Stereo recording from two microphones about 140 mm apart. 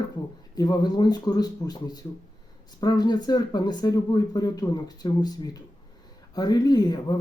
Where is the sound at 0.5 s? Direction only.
30° left (ahead or behind).